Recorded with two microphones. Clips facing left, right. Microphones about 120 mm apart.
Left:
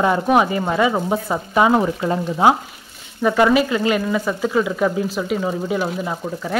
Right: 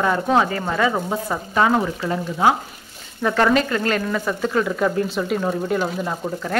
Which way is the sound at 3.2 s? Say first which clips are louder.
Left 3 dB; 10° left (ahead or behind).